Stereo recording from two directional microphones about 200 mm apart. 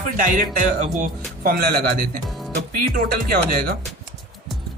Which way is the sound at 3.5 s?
50° right (ahead or behind).